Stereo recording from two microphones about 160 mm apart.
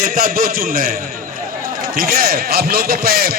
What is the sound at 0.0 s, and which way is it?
Speech, 60° right (ahead or behind).